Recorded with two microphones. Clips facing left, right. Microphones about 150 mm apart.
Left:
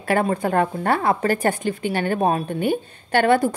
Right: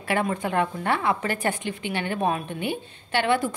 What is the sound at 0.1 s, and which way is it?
A woman's voice, 40° left (ahead or behind).